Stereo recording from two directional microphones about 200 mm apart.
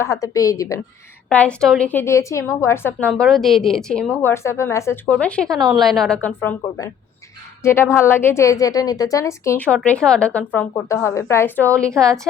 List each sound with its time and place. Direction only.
0.0 s a woman's voice: 15° left (ahead or behind)
1.3 s a woman's voice: 5° left (ahead or behind)